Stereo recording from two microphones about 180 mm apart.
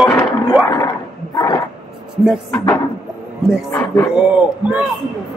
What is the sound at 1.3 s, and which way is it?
Speech, 25° left (ahead or behind).